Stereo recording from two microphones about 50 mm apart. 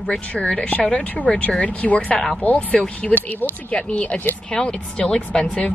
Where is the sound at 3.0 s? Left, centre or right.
Centre.